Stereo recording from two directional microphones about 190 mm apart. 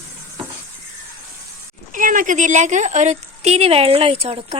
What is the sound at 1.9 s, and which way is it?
A woman's voice, 45° right (ahead or behind).